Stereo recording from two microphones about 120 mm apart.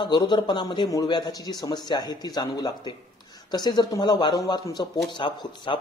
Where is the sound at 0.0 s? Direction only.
40° left (ahead or behind).